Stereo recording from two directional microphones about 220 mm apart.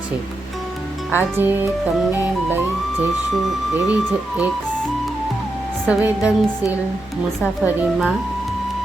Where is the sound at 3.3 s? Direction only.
5° right (ahead or behind).